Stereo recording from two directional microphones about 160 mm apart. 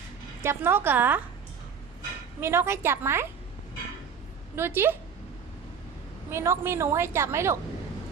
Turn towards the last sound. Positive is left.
turn(degrees=-15)  # may be behind; listen again after turning